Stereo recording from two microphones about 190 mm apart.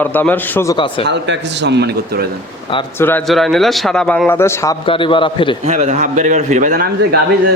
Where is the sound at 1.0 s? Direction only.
65° right (ahead or behind).